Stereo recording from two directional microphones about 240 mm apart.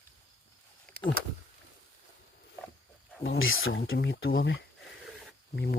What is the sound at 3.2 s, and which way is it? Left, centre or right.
Speech, left.